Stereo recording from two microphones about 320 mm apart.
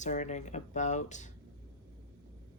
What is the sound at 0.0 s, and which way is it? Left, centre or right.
Speech, left.